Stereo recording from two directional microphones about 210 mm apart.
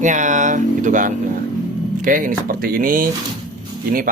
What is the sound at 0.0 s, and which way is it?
Speech, 35° right (ahead or behind).